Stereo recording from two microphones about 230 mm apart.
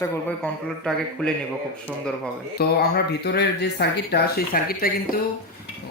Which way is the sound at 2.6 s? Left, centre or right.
Left.